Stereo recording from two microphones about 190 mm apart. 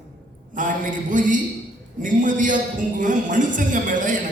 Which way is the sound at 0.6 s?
45° right (ahead or behind).